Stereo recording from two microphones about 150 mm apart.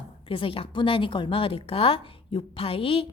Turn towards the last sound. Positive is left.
turn(degrees=40)  # may be behind; listen again after turning